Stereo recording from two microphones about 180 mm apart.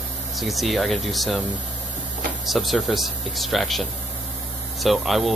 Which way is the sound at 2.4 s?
Centre (ahead or behind).